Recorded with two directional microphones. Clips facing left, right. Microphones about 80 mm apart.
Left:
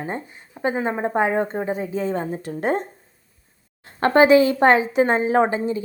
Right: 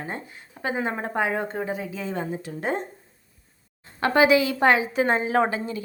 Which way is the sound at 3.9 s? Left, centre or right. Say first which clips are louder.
Left 5 dB; left.